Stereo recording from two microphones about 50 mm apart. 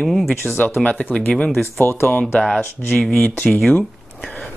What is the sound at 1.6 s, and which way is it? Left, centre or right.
Speech, left.